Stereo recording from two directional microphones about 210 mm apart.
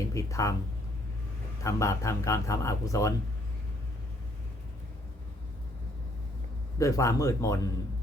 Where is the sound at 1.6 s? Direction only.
15° left (ahead or behind).